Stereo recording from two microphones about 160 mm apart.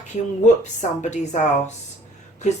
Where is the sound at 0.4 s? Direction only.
45° left (ahead or behind).